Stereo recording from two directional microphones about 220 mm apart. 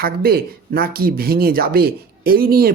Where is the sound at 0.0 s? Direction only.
45° right (ahead or behind).